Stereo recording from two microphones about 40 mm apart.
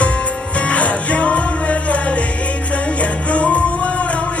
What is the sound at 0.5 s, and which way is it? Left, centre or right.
Music, left.